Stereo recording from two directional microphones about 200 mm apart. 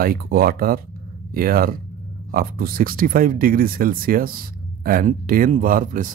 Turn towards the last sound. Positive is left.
turn(degrees=-40)  # may be behind; listen again after turning